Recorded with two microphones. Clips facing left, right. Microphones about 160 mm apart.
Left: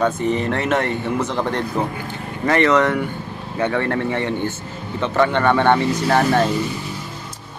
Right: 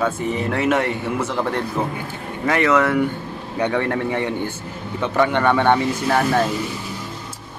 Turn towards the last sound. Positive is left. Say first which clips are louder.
# left 2 dB
turn(degrees=-5)  # may be behind; listen again after turning